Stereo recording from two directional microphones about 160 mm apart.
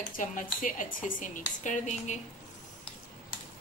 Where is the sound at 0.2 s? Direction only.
55° left (ahead or behind).